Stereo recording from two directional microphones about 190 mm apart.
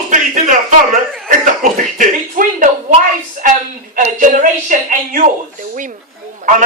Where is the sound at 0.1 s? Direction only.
40° right (ahead or behind).